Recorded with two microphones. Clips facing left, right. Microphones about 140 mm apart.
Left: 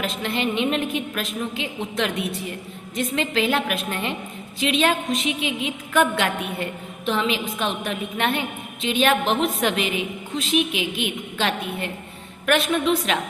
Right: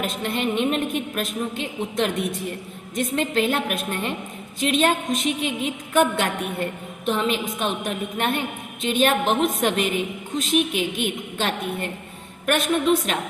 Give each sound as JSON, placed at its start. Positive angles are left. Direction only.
{"t": 0.0, "sound": "a woman's voice", "side_deg": -50}
{"t": 8.8, "sound": "a woman's voice", "side_deg": -50}